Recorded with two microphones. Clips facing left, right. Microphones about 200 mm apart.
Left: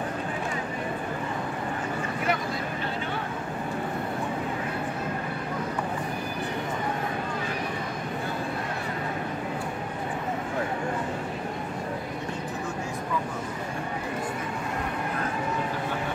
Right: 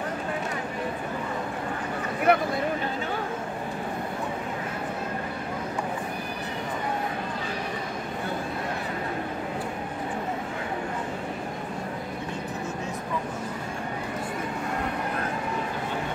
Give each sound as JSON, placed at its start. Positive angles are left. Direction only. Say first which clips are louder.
{"t": 2.3, "sound": "speech", "louder": "right 8 dB", "side_deg": -60}